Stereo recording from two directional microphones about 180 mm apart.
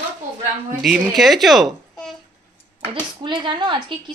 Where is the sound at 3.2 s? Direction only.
25° right (ahead or behind).